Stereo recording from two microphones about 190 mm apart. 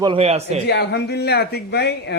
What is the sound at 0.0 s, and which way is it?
Speech, 30° right (ahead or behind).